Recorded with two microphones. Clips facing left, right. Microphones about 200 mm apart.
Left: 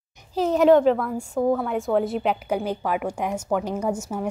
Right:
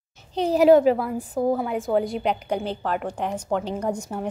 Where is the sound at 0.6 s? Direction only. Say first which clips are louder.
Right 1 dB; 5° right (ahead or behind).